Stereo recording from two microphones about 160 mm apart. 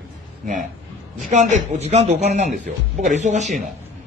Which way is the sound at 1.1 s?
50° right (ahead or behind).